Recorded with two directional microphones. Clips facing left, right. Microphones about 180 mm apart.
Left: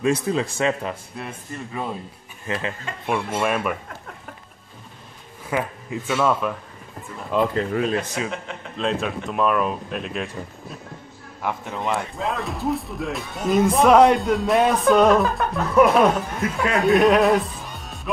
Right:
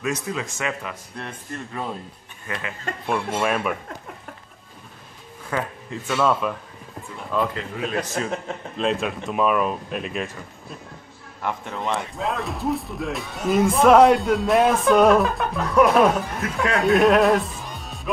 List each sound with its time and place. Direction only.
0.0 s a man's voice: 30° left (ahead or behind)
1.1 s speech: 5° left (ahead or behind)
2.4 s speech: 25° left (ahead or behind)
3.1 s speech: centre (ahead or behind)
5.5 s speech: 15° left (ahead or behind)
6.0 s speech: 5° left (ahead or behind)
8.2 s speech: 45° right (ahead or behind)
8.7 s speech: centre (ahead or behind)
11.4 s speech: centre (ahead or behind)
18.1 s music: centre (ahead or behind)